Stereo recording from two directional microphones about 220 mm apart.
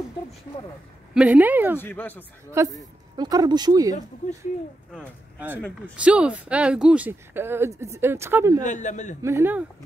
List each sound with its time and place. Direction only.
1.1 s speech: 5° right (ahead or behind)
1.8 s speech: 10° left (ahead or behind)
2.6 s speech: 15° right (ahead or behind)
4.9 s speech: 5° right (ahead or behind)
8.6 s a man's voice: 35° left (ahead or behind)
9.2 s speech: 10° right (ahead or behind)